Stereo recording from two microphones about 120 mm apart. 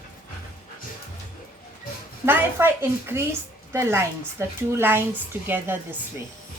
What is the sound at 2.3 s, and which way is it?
A woman's voice, 20° right (ahead or behind).